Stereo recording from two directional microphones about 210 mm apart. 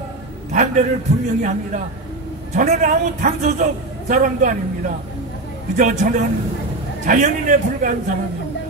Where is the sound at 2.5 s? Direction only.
35° right (ahead or behind).